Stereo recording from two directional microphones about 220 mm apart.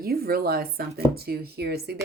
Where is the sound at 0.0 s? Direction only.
45° right (ahead or behind).